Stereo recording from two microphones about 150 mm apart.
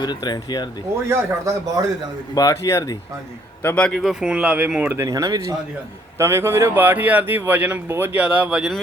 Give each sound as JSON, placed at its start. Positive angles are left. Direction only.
{"t": 0.0, "sound": "speech", "side_deg": 30}
{"t": 1.0, "sound": "a man's voice", "side_deg": -20}
{"t": 2.3, "sound": "speech", "side_deg": 25}
{"t": 3.6, "sound": "a man's voice", "side_deg": 10}